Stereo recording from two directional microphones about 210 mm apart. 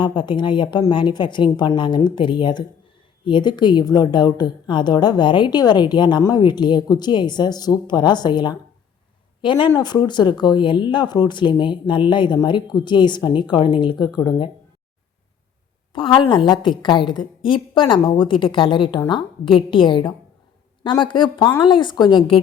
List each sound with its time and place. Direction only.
0.0 s speech: 20° left (ahead or behind)
15.9 s a woman's voice: 25° left (ahead or behind)